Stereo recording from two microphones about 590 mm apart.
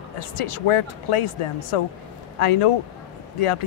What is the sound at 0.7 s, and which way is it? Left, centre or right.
A man's voice, left.